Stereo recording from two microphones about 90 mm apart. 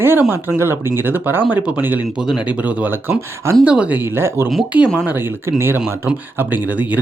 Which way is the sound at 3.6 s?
15° right (ahead or behind).